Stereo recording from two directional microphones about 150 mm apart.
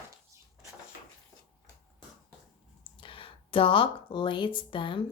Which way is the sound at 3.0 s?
35° left (ahead or behind).